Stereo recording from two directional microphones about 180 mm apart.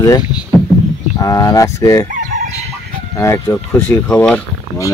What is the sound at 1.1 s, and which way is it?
Speech, 20° left (ahead or behind).